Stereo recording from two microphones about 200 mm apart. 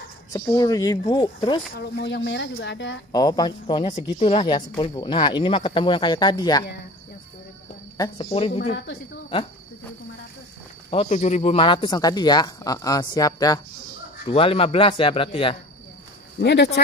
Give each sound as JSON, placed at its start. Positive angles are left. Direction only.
{"t": 0.3, "sound": "speech", "side_deg": 20}
{"t": 1.8, "sound": "speech", "side_deg": 60}
{"t": 3.1, "sound": "speech", "side_deg": 20}
{"t": 8.0, "sound": "speech", "side_deg": 30}
{"t": 10.9, "sound": "speech", "side_deg": 35}
{"t": 14.2, "sound": "speech", "side_deg": 30}
{"t": 16.3, "sound": "speech", "side_deg": 60}